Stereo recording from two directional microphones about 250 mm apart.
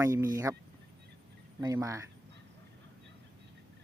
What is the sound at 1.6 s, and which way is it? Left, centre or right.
Speech, centre.